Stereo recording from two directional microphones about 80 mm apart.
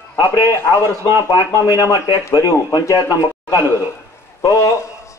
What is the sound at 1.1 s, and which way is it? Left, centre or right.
Speech, left.